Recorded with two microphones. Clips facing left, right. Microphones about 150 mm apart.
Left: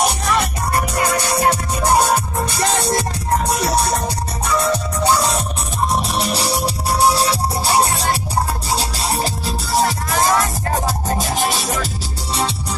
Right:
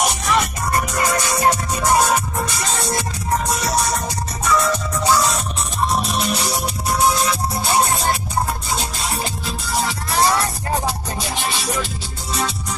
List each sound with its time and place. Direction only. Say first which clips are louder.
1.1 s music: even; 30° left (ahead or behind)
4.5 s music: even; 30° left (ahead or behind)